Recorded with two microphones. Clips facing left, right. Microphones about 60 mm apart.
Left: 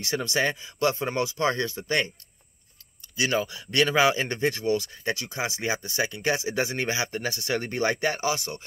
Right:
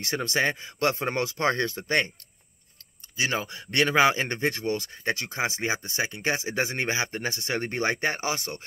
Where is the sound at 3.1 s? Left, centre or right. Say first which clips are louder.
Left 2 dB; right.